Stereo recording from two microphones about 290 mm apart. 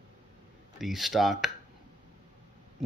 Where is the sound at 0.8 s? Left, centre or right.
Centre.